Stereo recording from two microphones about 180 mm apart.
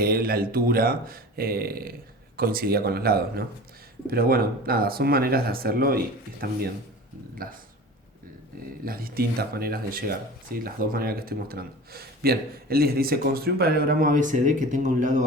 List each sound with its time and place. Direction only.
0.0 s speech: 55° right (ahead or behind)
8.8 s speech: 55° right (ahead or behind)